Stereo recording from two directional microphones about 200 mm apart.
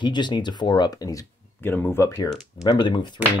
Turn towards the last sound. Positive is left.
turn(degrees=20)  # may be behind; listen again after turning